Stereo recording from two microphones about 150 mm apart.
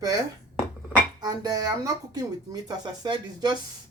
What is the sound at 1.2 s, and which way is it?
Speech, 25° right (ahead or behind).